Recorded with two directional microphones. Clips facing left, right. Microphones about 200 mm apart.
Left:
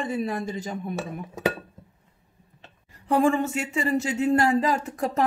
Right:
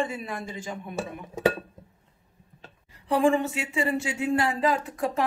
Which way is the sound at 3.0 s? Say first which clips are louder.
Left 1 dB; 45° left (ahead or behind).